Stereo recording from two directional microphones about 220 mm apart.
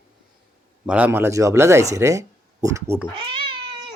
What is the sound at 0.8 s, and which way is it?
Speech, 5° right (ahead or behind).